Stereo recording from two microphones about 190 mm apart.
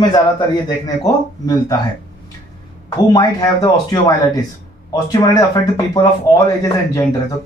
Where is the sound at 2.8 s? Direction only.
20° left (ahead or behind).